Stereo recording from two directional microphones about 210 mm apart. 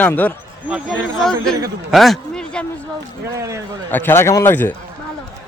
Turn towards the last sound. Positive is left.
turn(degrees=10)  # may be behind; listen again after turning